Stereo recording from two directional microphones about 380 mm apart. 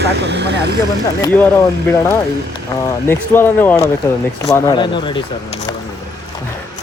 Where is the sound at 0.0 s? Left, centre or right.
Right.